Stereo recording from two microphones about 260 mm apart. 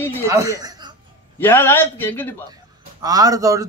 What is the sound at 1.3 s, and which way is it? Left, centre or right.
Speech, centre.